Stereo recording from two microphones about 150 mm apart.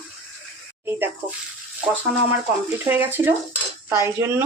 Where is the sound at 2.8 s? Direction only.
15° right (ahead or behind).